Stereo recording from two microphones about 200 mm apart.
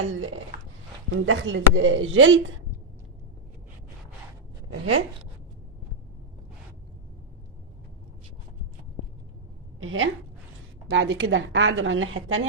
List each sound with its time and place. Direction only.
0.0 s speech: 80° right
4.7 s speech: 75° right (ahead or behind)
9.8 s speech: 75° right (ahead or behind)